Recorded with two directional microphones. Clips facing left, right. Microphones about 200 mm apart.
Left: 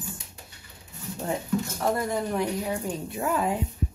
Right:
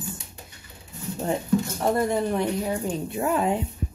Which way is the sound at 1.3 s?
25° right (ahead or behind).